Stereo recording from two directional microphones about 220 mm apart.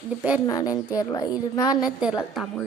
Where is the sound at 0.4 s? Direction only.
15° left (ahead or behind).